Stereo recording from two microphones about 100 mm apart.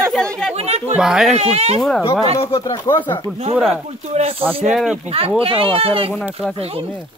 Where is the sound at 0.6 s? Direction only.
90° right.